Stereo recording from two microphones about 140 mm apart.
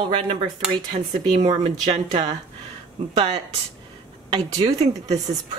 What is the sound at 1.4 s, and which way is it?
Speech, 35° right (ahead or behind).